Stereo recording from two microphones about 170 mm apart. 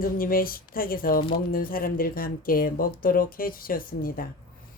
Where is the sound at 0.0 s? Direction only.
55° left (ahead or behind).